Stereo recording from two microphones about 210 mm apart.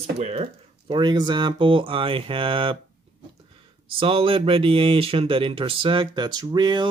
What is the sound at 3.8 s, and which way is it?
Speech, 25° right (ahead or behind).